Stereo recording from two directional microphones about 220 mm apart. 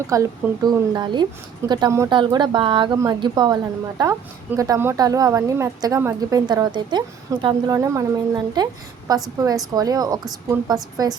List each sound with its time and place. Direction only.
0.1 s a woman's voice: 15° right (ahead or behind)